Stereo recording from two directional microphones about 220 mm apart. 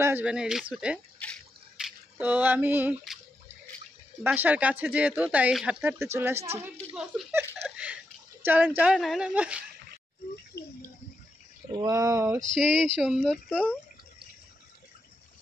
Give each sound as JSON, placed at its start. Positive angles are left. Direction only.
{"t": 0.0, "sound": "speech", "side_deg": -5}
{"t": 1.2, "sound": "drip", "side_deg": 0}
{"t": 4.2, "sound": "speech", "side_deg": -10}
{"t": 7.0, "sound": "a sound", "side_deg": -5}
{"t": 8.5, "sound": "speech", "side_deg": -10}
{"t": 10.5, "sound": "a sound", "side_deg": 50}
{"t": 11.7, "sound": "speech", "side_deg": -15}
{"t": 12.4, "sound": "speech", "side_deg": 0}